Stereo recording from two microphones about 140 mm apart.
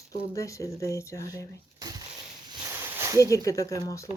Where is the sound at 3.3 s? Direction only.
25° left (ahead or behind).